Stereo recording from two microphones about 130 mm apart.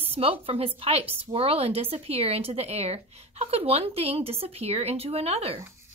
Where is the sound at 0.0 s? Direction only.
50° right (ahead or behind).